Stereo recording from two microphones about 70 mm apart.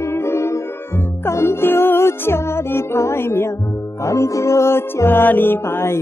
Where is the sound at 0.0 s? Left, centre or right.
Left.